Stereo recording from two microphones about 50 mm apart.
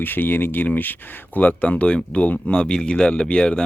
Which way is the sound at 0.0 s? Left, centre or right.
Left.